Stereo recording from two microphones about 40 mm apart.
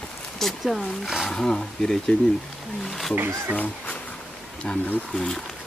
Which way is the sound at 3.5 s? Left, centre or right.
Left.